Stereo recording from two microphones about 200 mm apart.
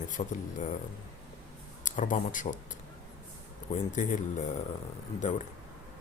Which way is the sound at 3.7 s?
40° left (ahead or behind).